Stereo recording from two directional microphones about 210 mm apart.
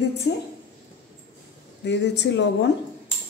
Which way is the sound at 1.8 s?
55° left (ahead or behind).